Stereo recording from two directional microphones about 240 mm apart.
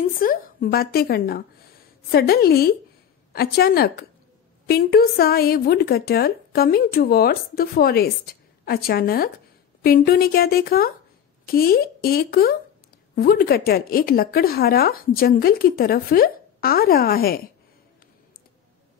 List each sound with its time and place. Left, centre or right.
0.2 s a woman's voice: left